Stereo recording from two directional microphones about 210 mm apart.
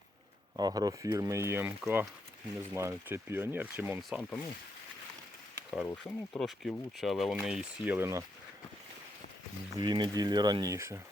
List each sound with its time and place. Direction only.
0.5 s speech: 20° right (ahead or behind)
5.8 s speech: 5° left (ahead or behind); by 8.2 s 10° right (ahead or behind)
9.7 s speech: 20° right (ahead or behind)